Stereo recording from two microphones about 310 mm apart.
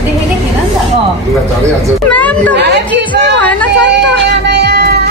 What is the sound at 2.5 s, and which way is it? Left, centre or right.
Speech, right.